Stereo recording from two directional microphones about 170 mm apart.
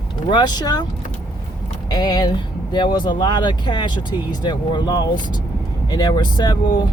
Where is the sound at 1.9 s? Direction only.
25° left (ahead or behind).